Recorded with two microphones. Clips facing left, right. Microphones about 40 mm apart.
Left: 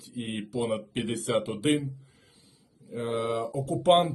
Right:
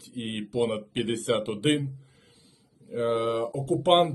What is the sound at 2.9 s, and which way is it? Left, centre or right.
Speech, right.